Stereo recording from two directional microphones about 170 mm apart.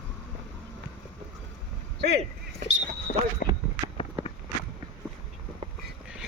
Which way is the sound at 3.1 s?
55° left (ahead or behind).